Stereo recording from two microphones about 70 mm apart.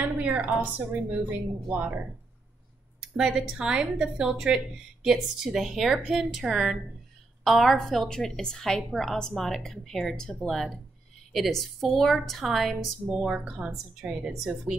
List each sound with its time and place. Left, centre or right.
0.0 s a sound: right
0.6 s a woman's voice: right
3.0 s a woman's voice: centre